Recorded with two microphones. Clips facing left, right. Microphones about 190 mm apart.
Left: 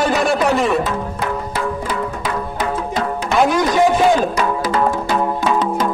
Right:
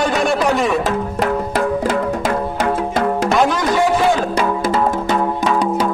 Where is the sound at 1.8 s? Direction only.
45° right (ahead or behind).